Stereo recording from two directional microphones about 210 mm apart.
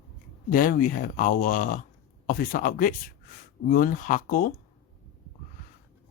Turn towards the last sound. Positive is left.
turn(degrees=40)  # may be behind; listen again after turning